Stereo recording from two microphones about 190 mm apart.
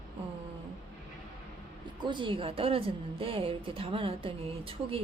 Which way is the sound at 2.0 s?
25° right (ahead or behind).